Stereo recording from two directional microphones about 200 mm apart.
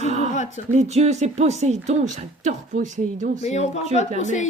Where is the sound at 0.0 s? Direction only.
35° right (ahead or behind).